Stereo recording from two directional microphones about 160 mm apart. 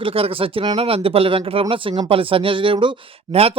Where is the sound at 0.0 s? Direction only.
35° right (ahead or behind).